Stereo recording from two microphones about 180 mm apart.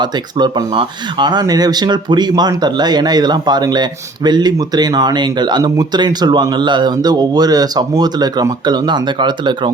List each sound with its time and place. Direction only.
0.0 s speech: 25° right (ahead or behind)